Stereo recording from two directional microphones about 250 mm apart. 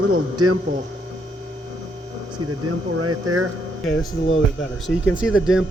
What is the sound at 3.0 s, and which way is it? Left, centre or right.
Speech, right.